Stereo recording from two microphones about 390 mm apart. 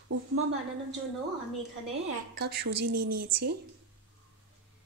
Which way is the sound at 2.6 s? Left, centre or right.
Right.